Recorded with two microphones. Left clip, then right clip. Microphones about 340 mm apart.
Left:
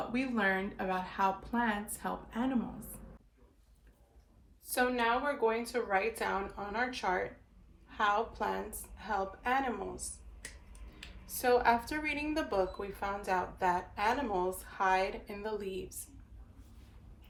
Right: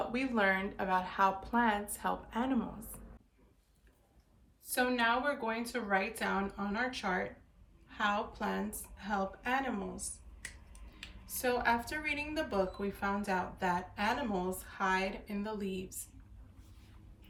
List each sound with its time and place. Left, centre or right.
0.1 s speech: centre
4.7 s a woman's voice: centre